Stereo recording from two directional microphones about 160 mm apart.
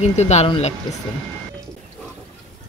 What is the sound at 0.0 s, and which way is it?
Speech, 45° left (ahead or behind).